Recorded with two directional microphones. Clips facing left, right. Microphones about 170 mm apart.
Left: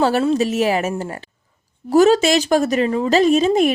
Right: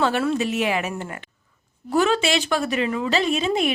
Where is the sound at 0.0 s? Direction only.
35° left (ahead or behind).